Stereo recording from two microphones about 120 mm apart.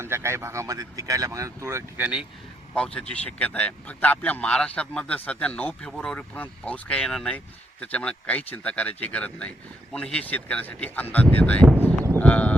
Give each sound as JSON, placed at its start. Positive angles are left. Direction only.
{"t": 0.0, "sound": "speech", "side_deg": -20}
{"t": 2.7, "sound": "speech", "side_deg": 10}